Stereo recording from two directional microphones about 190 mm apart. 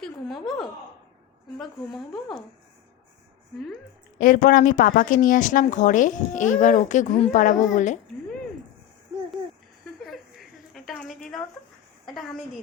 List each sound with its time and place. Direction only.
0.0 s a woman's voice: centre (ahead or behind)
1.5 s speech: centre (ahead or behind)
4.2 s a woman's voice: 45° left (ahead or behind)
10.1 s a sound: centre (ahead or behind)
12.0 s speech: centre (ahead or behind)